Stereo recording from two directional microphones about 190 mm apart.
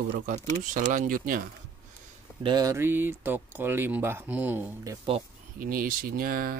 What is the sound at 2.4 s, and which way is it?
Speech, 20° right (ahead or behind).